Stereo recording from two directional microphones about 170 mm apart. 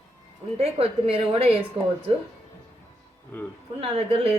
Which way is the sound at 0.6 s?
35° right (ahead or behind).